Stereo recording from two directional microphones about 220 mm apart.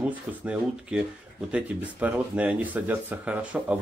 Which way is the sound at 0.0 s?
5° right (ahead or behind).